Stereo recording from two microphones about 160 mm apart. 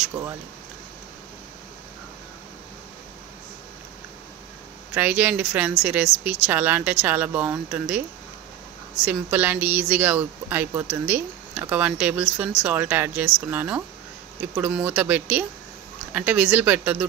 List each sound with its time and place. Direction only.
0.0 s speech: 15° right (ahead or behind)
4.9 s speech: 10° right (ahead or behind)
9.0 s speech: 10° right (ahead or behind)